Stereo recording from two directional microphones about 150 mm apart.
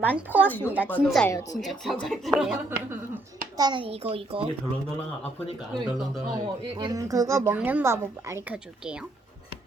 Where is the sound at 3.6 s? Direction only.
30° right (ahead or behind).